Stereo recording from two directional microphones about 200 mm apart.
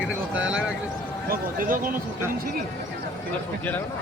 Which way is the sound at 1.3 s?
45° right (ahead or behind).